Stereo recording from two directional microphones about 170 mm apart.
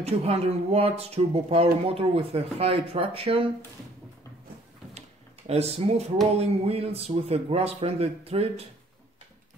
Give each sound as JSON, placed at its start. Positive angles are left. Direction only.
{"t": 0.0, "sound": "speech", "side_deg": -35}
{"t": 5.5, "sound": "speech", "side_deg": -40}